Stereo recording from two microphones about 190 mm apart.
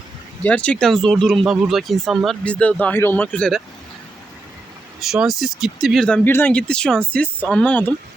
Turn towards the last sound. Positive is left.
turn(degrees=10)  # may be behind; listen again after turning